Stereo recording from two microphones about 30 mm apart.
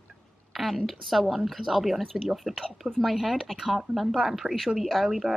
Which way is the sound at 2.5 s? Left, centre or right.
Right.